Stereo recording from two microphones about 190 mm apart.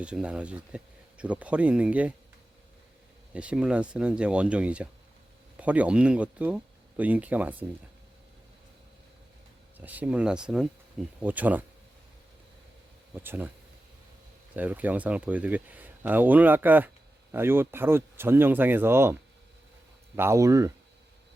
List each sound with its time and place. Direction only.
0.0 s speech: 5° right (ahead or behind)
3.3 s speech: 5° right (ahead or behind)
9.7 s speech: 10° right (ahead or behind)
13.2 s speech: 10° right (ahead or behind)
14.5 s speech: 10° right (ahead or behind)
20.1 s speech: 15° right (ahead or behind)